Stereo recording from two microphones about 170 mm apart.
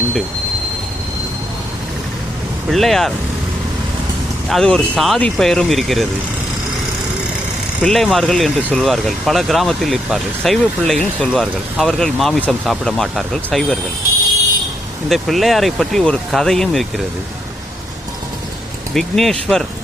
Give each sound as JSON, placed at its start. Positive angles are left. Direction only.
{"t": 2.6, "sound": "speech", "side_deg": 0}
{"t": 4.4, "sound": "speech", "side_deg": 0}
{"t": 7.8, "sound": "speech", "side_deg": 5}
{"t": 15.1, "sound": "speech", "side_deg": 0}
{"t": 18.9, "sound": "speech", "side_deg": 0}